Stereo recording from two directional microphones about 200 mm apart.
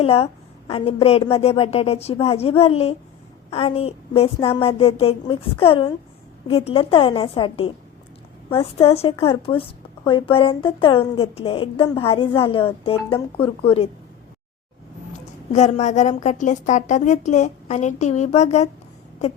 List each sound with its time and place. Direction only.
0.0 s speech: 30° left (ahead or behind)
15.5 s a woman's voice: 35° left (ahead or behind)